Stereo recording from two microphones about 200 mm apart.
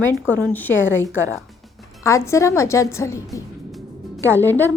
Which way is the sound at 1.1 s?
75° left (ahead or behind).